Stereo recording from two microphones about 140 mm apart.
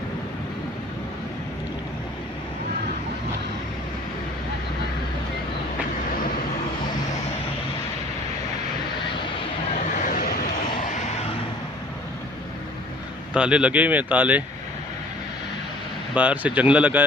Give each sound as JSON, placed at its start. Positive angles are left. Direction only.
{"t": 10.0, "sound": "vehicle", "side_deg": 75}
{"t": 13.3, "sound": "speech", "side_deg": -10}
{"t": 16.1, "sound": "speech", "side_deg": -10}